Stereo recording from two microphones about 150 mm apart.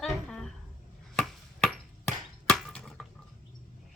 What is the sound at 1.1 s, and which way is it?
Chop, 5° left (ahead or behind).